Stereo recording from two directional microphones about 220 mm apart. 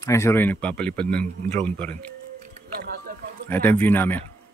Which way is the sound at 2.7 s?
40° right (ahead or behind).